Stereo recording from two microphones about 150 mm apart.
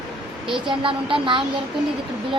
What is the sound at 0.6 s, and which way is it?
Speech, 35° right (ahead or behind).